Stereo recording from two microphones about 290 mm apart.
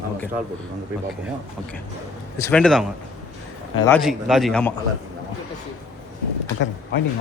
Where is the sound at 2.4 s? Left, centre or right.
Centre.